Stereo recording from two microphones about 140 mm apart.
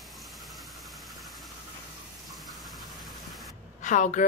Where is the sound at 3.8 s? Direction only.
60° left (ahead or behind).